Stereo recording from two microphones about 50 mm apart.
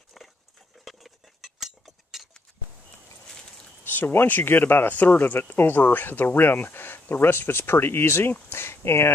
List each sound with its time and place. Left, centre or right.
0.2 s dog: centre
0.8 s cutlery: centre
3.8 s speech: left